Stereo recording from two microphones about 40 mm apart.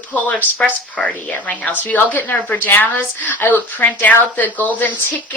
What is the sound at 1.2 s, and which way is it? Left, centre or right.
Speech, left.